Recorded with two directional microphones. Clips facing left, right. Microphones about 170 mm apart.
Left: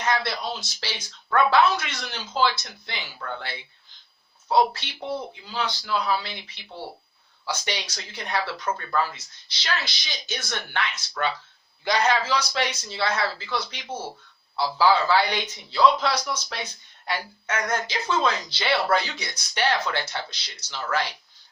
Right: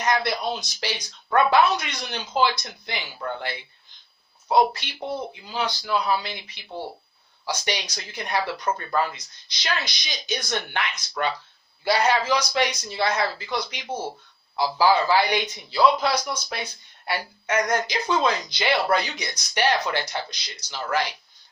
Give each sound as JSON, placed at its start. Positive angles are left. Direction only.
{"t": 0.0, "sound": "speech", "side_deg": -15}
{"t": 5.5, "sound": "speech", "side_deg": -15}
{"t": 7.7, "sound": "speech", "side_deg": -15}